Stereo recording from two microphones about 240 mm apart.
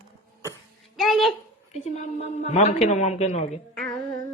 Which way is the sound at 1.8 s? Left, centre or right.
Left.